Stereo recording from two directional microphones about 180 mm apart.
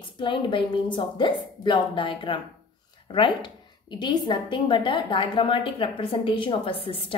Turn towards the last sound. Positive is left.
turn(degrees=30)  # may be behind; listen again after turning